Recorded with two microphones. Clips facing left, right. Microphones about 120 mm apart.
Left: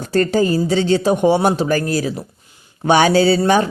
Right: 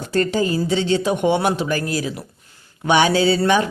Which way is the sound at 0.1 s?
40° left (ahead or behind).